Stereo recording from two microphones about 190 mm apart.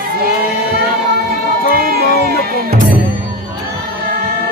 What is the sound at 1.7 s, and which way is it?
Music, 55° right (ahead or behind).